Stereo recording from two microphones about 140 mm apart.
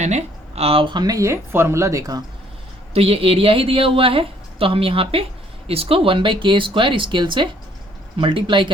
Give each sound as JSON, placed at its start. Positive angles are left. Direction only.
{"t": 0.0, "sound": "speech", "side_deg": -55}
{"t": 2.9, "sound": "a woman's voice", "side_deg": -45}